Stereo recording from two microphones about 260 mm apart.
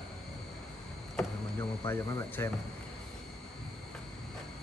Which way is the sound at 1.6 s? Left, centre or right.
Centre.